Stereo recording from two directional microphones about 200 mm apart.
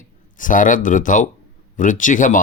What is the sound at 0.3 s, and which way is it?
Speech, 40° left (ahead or behind).